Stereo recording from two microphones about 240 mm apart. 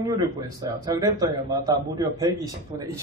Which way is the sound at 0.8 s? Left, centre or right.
Centre.